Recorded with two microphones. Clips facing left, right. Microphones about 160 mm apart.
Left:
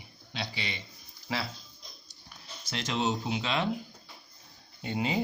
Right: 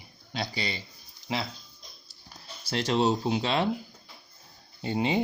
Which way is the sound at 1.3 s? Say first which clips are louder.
Right 2 dB; 20° right (ahead or behind).